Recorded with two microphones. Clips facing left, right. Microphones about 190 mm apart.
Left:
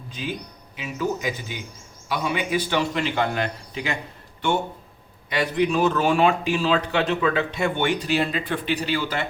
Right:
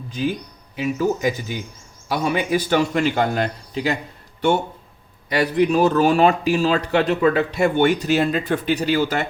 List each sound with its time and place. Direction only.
0.8 s a man's voice: 45° right (ahead or behind)
5.3 s a man's voice: 40° right (ahead or behind)